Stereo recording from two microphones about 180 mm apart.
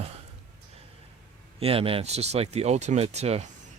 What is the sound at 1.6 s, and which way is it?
Speech, 30° right (ahead or behind).